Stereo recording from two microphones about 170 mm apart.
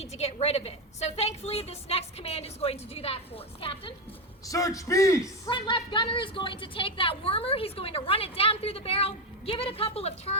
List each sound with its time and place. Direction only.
0.0 s a woman's voice: 40° left (ahead or behind)
4.4 s a man's voice: 20° left (ahead or behind)
5.5 s a woman's voice: 30° left (ahead or behind)